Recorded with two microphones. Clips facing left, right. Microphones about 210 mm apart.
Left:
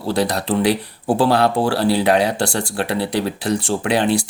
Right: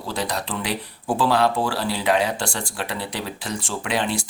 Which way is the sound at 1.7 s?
65° left (ahead or behind).